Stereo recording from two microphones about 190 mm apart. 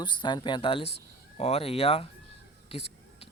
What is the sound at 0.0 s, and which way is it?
Speech, 25° left (ahead or behind).